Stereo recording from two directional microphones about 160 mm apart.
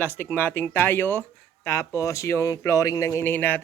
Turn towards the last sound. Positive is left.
turn(degrees=10)  # may be behind; listen again after turning